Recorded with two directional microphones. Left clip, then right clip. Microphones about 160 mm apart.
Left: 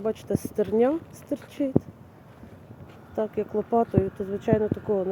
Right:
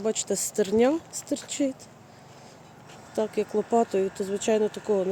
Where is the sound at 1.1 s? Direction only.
10° right (ahead or behind).